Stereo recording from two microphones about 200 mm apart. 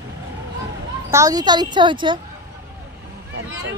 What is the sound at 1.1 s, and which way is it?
A child's voice, 15° right (ahead or behind).